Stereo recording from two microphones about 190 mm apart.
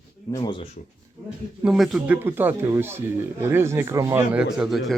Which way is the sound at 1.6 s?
Centre (ahead or behind).